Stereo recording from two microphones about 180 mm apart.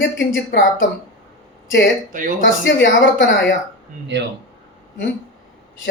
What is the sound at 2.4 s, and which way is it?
Speech, 75° left (ahead or behind).